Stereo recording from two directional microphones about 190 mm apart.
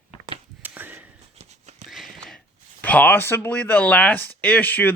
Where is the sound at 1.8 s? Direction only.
Centre (ahead or behind).